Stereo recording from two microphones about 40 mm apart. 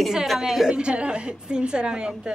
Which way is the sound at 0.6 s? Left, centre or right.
Right.